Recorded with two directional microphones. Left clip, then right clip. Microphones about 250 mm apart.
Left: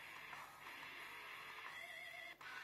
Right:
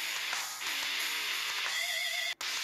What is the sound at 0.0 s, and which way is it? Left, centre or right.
Music, right.